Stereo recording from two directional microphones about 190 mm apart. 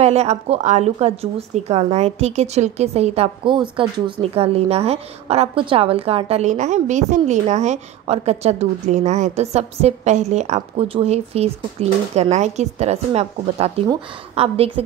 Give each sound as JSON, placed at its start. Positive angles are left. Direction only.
{"t": 0.0, "sound": "a woman's voice", "side_deg": -35}